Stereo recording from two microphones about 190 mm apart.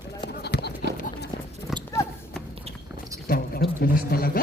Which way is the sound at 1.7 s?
Centre (ahead or behind).